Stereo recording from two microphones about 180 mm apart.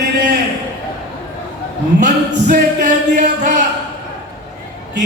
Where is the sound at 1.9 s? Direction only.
45° right (ahead or behind).